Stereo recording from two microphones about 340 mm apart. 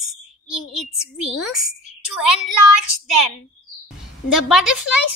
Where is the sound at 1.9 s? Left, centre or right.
Centre.